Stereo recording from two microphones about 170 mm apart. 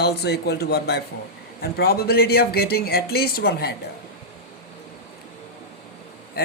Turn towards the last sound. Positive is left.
turn(degrees=65)  # may be behind; listen again after turning